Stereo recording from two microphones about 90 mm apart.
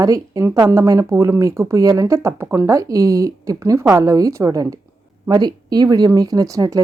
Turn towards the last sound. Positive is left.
turn(degrees=-40)  # may be behind; listen again after turning